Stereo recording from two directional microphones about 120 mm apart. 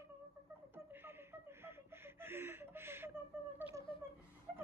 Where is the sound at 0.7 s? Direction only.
20° right (ahead or behind).